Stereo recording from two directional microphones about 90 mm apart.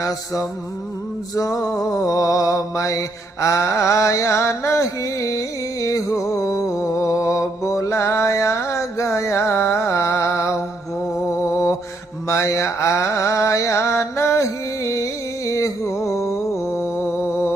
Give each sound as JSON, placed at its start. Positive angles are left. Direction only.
{"t": 0.0, "sound": "mantra", "side_deg": 35}
{"t": 3.4, "sound": "a sound", "side_deg": 35}
{"t": 11.1, "sound": "music", "side_deg": 30}
{"t": 12.3, "sound": "mantra", "side_deg": 35}